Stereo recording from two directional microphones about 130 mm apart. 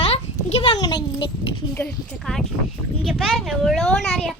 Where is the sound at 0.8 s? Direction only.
30° left (ahead or behind).